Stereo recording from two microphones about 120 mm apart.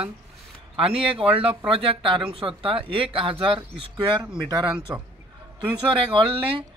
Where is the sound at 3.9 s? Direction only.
35° right (ahead or behind).